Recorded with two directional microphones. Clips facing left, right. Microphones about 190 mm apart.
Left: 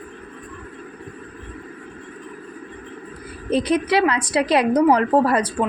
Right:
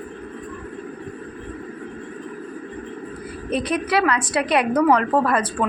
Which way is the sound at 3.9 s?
25° left (ahead or behind).